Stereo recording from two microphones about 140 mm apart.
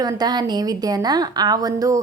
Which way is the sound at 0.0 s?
30° right (ahead or behind).